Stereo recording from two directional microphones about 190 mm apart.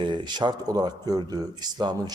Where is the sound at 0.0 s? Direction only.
25° right (ahead or behind).